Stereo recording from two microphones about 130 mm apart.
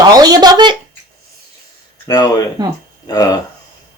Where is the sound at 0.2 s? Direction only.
30° right (ahead or behind).